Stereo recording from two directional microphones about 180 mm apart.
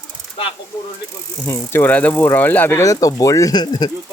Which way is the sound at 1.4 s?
15° left (ahead or behind).